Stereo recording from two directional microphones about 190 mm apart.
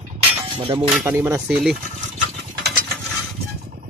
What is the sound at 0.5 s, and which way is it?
Speech, 25° right (ahead or behind).